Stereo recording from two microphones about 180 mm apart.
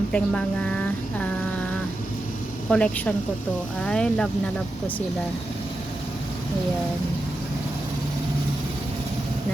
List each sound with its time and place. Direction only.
0.1 s speech: 5° left (ahead or behind)
2.6 s a woman's voice: 5° left (ahead or behind)